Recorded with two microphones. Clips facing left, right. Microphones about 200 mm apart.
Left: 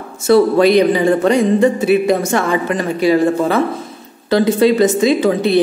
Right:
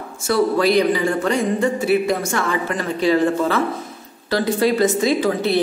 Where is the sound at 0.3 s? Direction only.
20° left (ahead or behind).